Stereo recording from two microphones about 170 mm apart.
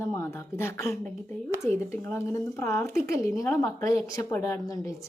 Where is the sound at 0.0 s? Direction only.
15° left (ahead or behind).